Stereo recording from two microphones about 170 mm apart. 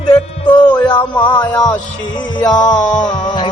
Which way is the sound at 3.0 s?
25° left (ahead or behind).